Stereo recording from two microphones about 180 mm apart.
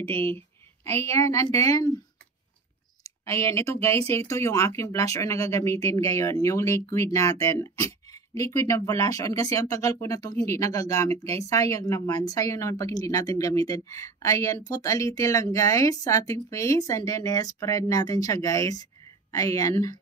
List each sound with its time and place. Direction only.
0.0 s speech: 10° left (ahead or behind)
3.0 s a woman's voice: 15° left (ahead or behind)